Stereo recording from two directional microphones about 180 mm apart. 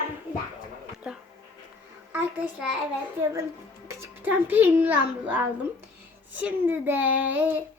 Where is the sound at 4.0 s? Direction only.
10° right (ahead or behind).